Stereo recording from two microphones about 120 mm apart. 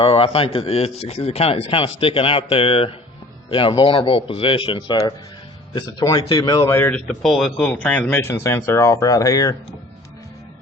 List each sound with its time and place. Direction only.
0.0 s a man's voice: 50° left (ahead or behind); by 6.7 s 35° left (ahead or behind)
6.7 s speech: 20° left (ahead or behind)
6.9 s speech: 5° left (ahead or behind); by 9.6 s 30° left (ahead or behind)